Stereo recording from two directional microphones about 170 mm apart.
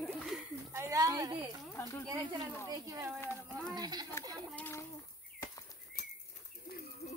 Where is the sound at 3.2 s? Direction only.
10° left (ahead or behind).